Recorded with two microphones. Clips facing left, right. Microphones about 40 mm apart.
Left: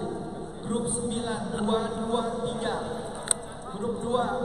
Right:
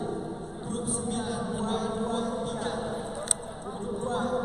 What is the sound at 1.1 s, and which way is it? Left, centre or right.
Speech, centre.